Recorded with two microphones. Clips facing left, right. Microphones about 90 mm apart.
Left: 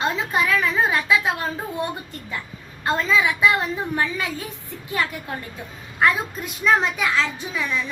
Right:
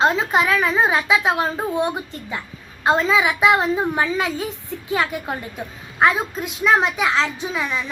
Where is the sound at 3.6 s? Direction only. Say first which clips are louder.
Right 5 dB; 20° right (ahead or behind).